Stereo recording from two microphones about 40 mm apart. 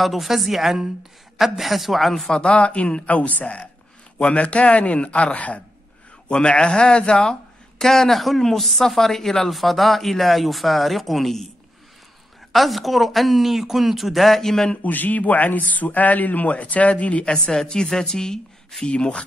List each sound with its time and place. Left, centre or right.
0.0 s speech: centre
2.3 s speech: left
3.1 s a man's voice: left
7.8 s speech: centre
12.5 s speech: centre
14.8 s speech: left
17.2 s speech: left
18.9 s speech: left